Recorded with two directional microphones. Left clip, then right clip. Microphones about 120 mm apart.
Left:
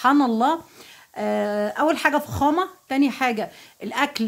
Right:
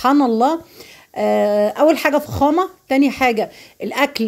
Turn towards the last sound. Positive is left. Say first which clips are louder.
# right 5 dB
turn(degrees=-25)  # may be behind; listen again after turning